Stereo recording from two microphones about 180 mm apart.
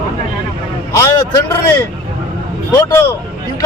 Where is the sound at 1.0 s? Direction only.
20° left (ahead or behind).